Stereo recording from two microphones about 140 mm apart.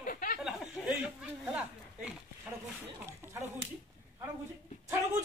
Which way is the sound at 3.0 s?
20° right (ahead or behind).